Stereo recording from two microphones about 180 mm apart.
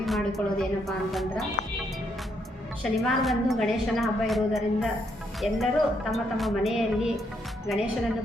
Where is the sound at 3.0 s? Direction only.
Centre (ahead or behind).